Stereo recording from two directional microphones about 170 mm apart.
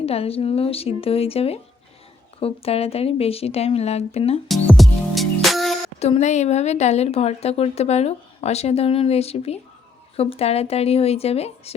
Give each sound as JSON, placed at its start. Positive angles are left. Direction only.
{"t": 0.0, "sound": "a woman's voice", "side_deg": 35}
{"t": 4.4, "sound": "music", "side_deg": 0}
{"t": 6.0, "sound": "a woman's voice", "side_deg": 40}